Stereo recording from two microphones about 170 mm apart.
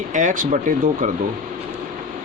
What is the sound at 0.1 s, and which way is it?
Speech, 45° right (ahead or behind).